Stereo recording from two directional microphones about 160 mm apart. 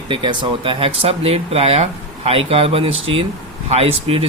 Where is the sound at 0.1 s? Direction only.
30° right (ahead or behind).